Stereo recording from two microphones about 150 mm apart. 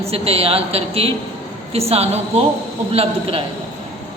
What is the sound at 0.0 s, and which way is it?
A man's voice, 40° right (ahead or behind).